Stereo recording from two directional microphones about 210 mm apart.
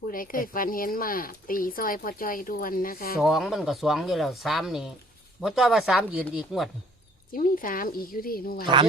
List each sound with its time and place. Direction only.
0.1 s speech: 40° left (ahead or behind)
3.2 s speech: centre (ahead or behind)
7.3 s speech: 40° left (ahead or behind)
8.6 s speech: 20° right (ahead or behind)